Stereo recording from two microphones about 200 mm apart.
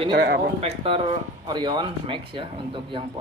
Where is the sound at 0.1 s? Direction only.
55° right (ahead or behind).